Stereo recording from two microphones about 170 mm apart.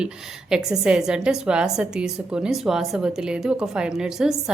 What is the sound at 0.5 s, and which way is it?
A woman's voice, 5° right (ahead or behind).